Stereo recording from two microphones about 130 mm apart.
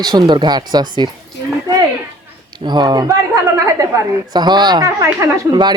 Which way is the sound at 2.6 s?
35° right (ahead or behind).